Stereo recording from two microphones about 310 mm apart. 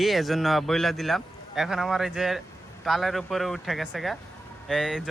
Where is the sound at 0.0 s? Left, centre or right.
Centre.